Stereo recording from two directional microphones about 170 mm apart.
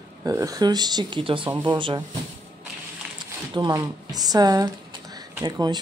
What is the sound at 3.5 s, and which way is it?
Speech, 25° right (ahead or behind).